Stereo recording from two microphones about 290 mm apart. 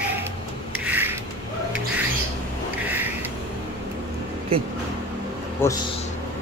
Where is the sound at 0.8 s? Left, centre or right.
Centre.